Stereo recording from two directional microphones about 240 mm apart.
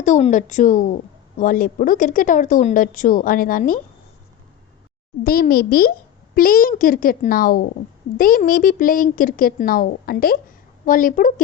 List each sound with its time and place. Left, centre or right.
0.0 s a woman's voice: left
5.2 s a woman's voice: left